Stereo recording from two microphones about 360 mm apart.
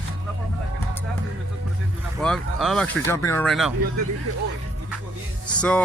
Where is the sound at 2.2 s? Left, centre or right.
Centre.